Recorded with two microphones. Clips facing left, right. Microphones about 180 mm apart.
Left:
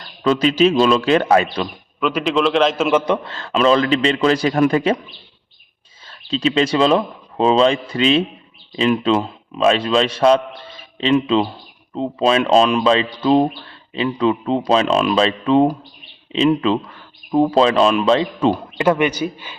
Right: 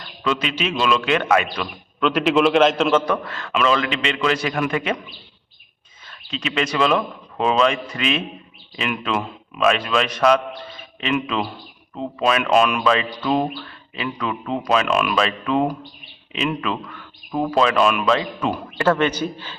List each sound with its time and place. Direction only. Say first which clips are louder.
0.2 s a man's voice: left 9 dB; 35° left (ahead or behind)
2.0 s a man's voice: right 1 dB; centre (ahead or behind)
3.1 s a man's voice: left 3 dB; 30° left (ahead or behind)
6.1 s a man's voice: left 9 dB; 30° left (ahead or behind)
18.8 s speech: left 1 dB; 15° left (ahead or behind)